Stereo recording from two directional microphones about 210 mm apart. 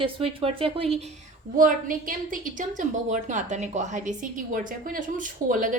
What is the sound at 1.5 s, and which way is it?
A woman's voice, 40° right (ahead or behind).